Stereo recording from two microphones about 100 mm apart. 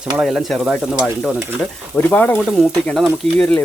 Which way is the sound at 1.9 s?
20° left (ahead or behind).